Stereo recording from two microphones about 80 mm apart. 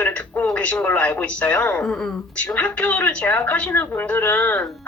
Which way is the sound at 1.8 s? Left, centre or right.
Centre.